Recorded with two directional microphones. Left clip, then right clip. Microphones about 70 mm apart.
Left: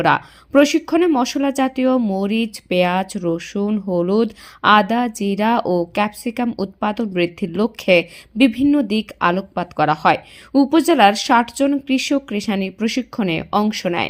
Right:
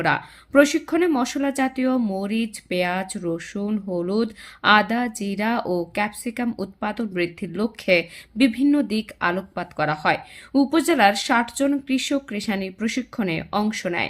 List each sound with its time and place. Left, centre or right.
0.0 s speech: left
0.6 s speech: left
1.4 s speech: left
10.7 s speech: left
13.4 s speech: left
13.8 s speech: left